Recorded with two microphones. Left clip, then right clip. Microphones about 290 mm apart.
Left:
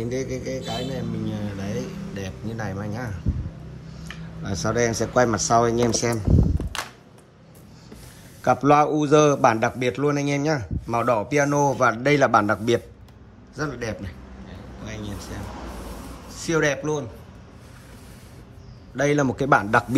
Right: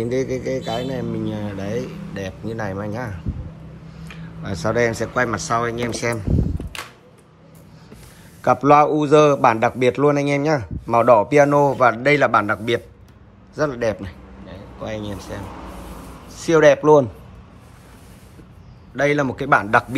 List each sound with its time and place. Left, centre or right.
0.0 s a man's voice: centre
4.4 s a man's voice: centre
8.4 s a man's voice: centre
18.9 s a man's voice: centre